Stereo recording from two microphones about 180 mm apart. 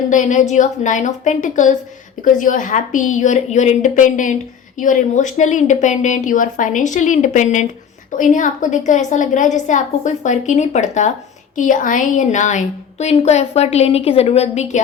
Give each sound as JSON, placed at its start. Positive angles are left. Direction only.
{"t": 0.1, "sound": "a woman's voice", "side_deg": 45}